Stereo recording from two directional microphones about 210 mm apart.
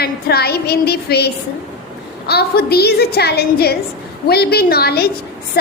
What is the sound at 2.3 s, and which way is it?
A woman's voice, 50° left (ahead or behind).